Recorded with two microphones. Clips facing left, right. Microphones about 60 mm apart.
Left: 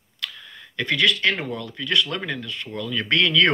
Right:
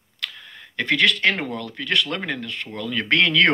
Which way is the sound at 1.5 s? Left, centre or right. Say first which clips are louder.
Even; right.